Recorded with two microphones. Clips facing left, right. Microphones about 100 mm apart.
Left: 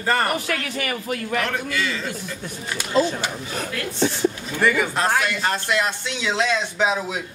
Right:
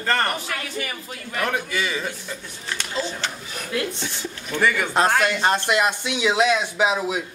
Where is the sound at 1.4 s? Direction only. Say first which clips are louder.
Even; 15° right (ahead or behind).